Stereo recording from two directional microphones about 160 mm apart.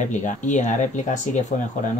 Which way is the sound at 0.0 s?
50° left (ahead or behind).